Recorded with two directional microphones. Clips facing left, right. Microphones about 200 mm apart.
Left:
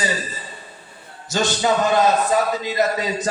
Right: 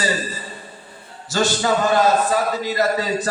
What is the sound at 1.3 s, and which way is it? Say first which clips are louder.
A man's voice: even; 20° left (ahead or behind).